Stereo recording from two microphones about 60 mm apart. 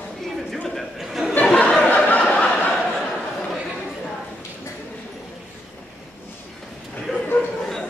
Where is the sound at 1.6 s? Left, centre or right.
Centre.